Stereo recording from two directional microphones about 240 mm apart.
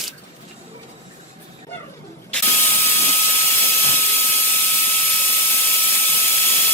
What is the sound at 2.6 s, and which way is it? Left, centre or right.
Printer, centre.